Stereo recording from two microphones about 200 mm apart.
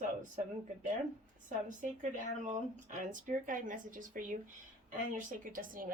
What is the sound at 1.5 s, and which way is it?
Speech, 40° right (ahead or behind).